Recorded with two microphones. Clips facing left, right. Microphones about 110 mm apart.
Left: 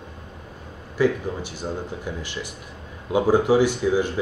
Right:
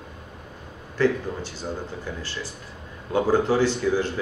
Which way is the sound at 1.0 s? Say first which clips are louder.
Left 1 dB; 15° left (ahead or behind).